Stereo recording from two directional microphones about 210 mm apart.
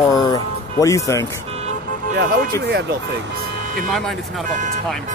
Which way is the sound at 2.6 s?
55° right (ahead or behind).